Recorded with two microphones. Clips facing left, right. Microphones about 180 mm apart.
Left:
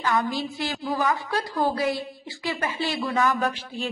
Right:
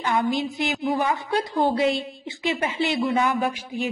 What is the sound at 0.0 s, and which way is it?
A woman's voice, 20° right (ahead or behind).